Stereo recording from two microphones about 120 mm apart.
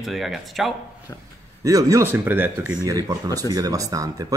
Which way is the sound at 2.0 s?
15° right (ahead or behind).